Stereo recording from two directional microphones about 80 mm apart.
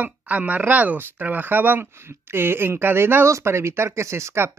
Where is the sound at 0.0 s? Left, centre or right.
Centre.